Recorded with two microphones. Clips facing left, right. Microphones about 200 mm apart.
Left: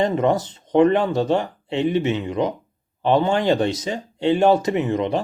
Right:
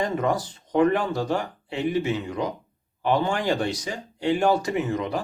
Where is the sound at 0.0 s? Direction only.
25° left (ahead or behind).